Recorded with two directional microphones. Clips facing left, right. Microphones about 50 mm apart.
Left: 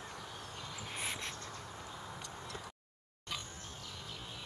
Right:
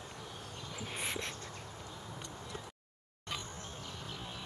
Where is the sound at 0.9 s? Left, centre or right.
Centre.